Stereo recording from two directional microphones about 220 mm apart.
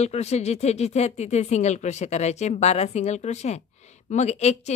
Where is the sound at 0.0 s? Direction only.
30° left (ahead or behind).